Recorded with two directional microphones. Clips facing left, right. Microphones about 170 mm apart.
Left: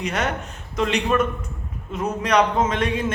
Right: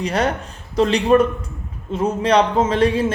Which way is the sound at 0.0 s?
35° right (ahead or behind).